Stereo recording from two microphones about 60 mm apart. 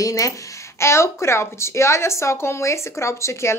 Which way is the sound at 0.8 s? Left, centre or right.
Left.